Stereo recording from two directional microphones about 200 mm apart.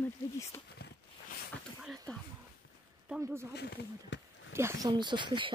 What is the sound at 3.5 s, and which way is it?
Speech, 55° left (ahead or behind).